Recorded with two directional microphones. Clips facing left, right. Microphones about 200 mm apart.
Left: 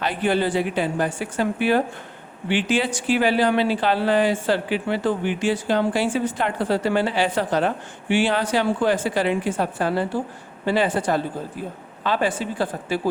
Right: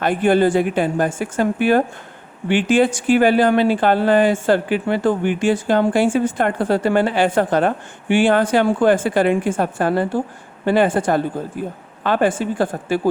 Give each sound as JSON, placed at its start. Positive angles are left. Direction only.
{"t": 0.0, "sound": "speech", "side_deg": -50}